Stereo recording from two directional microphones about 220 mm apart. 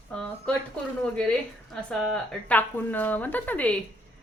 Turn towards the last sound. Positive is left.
turn(degrees=5)  # may be behind; listen again after turning